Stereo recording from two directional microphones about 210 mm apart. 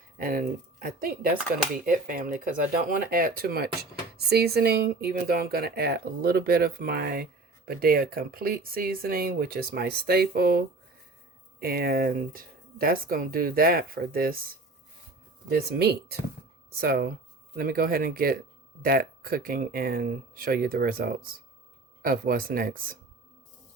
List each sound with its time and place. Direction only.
0.2 s speech: 45° right (ahead or behind)
15.4 s speech: 50° right (ahead or behind)